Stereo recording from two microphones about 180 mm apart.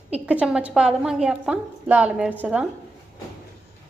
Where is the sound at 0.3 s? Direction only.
5° right (ahead or behind).